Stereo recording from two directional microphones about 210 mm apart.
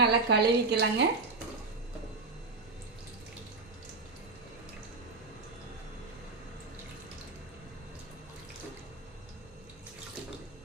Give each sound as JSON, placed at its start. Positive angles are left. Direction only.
{"t": 0.0, "sound": "speech", "side_deg": -50}